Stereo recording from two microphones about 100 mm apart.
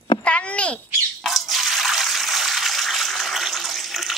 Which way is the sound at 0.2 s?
10° left (ahead or behind).